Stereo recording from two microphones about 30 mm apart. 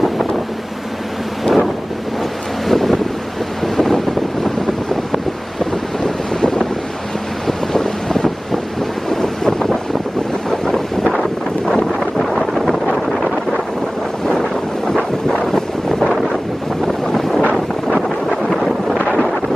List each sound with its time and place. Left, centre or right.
1.4 s wind noise: centre
2.7 s wind noise: centre
6.0 s wind noise: left
12.2 s wind noise: centre
15.4 s wind noise: centre